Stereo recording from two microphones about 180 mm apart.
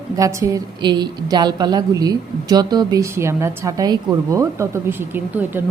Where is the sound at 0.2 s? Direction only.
15° right (ahead or behind).